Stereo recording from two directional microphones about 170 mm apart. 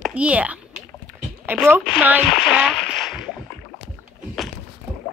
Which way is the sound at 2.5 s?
Centre (ahead or behind).